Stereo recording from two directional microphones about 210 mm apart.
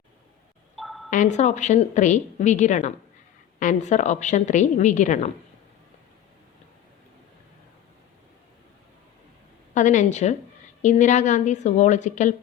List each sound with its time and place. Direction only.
0.8 s a sound: centre (ahead or behind)
1.1 s a woman's voice: 35° left (ahead or behind)
9.7 s a woman's voice: 35° left (ahead or behind)